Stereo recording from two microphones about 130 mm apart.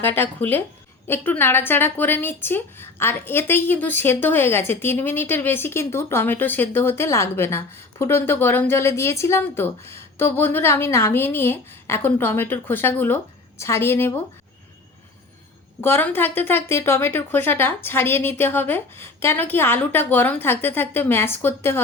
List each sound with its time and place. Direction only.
0.0 s a woman's voice: 15° left (ahead or behind)
15.8 s a woman's voice: 15° left (ahead or behind)